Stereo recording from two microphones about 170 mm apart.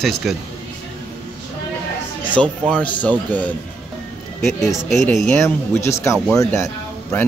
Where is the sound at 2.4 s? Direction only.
5° left (ahead or behind).